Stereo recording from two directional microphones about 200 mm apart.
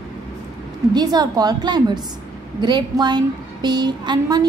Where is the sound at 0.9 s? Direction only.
20° right (ahead or behind).